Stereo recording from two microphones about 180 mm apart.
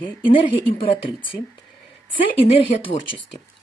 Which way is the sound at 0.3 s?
30° left (ahead or behind).